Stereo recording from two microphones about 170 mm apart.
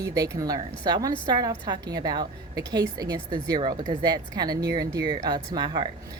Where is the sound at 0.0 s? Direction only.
20° right (ahead or behind).